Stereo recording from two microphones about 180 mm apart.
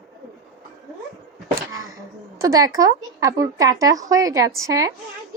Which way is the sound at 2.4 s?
20° right (ahead or behind).